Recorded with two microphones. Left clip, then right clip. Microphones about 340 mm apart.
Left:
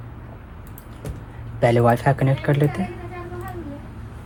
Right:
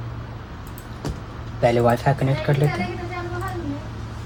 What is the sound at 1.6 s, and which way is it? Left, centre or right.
Speech, left.